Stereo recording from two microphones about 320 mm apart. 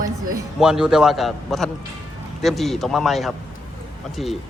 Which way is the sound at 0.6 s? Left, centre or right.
Centre.